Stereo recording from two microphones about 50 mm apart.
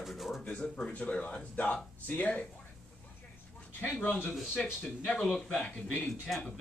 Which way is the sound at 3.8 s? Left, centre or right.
Left.